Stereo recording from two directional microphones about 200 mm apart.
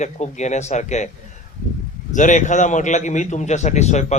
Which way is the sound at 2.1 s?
40° left (ahead or behind).